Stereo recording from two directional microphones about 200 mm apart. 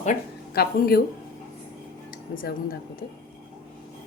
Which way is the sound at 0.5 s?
50° left (ahead or behind).